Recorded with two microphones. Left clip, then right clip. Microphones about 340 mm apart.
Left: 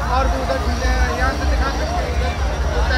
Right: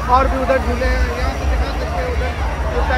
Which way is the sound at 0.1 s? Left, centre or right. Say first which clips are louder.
Right 7 dB; centre.